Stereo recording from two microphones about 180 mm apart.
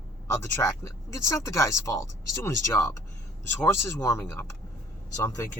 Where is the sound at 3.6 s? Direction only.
15° left (ahead or behind).